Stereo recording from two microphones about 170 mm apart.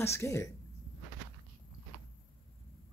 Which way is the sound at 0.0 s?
15° left (ahead or behind).